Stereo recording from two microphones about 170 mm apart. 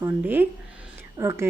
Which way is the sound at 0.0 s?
10° right (ahead or behind).